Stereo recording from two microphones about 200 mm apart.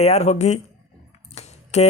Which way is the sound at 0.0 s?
35° left (ahead or behind).